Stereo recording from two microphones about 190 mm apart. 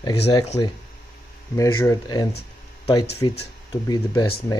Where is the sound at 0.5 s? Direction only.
20° left (ahead or behind).